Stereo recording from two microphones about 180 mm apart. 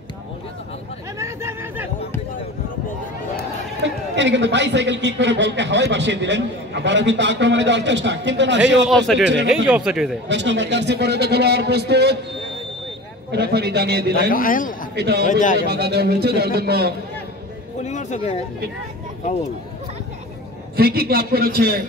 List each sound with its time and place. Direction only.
1.1 s speech: 15° right (ahead or behind)
3.3 s a man's voice: 80° right
8.8 s a man's voice: centre (ahead or behind)
10.2 s a man's voice: 80° right
13.3 s a man's voice: 65° right (ahead or behind)
14.3 s a man's voice: 50° left (ahead or behind)
15.0 s a man's voice: 65° right (ahead or behind)
15.2 s a man's voice: 45° left (ahead or behind)
15.6 s a man's voice: 65° right (ahead or behind)
17.8 s a sound: 40° left (ahead or behind)
20.7 s a man's voice: 55° right (ahead or behind)